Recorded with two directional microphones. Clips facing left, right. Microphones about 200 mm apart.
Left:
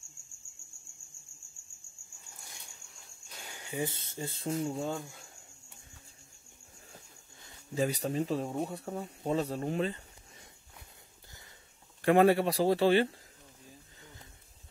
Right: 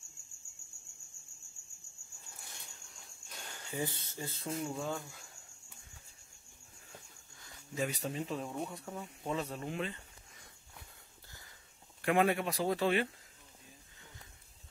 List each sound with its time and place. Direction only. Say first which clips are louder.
2.8 s a sound: even; centre (ahead or behind)
3.4 s speech: left 3 dB; 15° left (ahead or behind)
7.4 s speech: left 6 dB; 30° left (ahead or behind)
12.0 s speech: left 6 dB; 35° left (ahead or behind)